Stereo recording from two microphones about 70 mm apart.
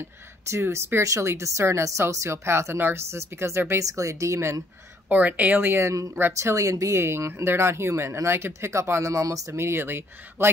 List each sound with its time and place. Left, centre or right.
0.5 s speech: right
5.1 s a woman's voice: right
5.8 s speech: right
6.1 s speech: right
6.5 s speech: right
9.6 s speech: right